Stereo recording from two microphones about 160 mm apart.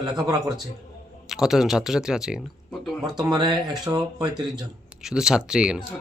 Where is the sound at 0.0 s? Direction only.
25° right (ahead or behind).